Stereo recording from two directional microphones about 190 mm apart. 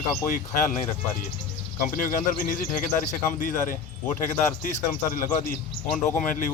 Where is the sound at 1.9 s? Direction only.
45° left (ahead or behind).